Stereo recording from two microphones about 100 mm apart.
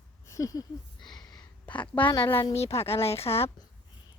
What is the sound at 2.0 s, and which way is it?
Speech, 55° left (ahead or behind).